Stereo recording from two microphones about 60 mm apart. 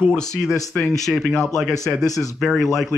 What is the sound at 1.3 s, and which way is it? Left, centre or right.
Speech, centre.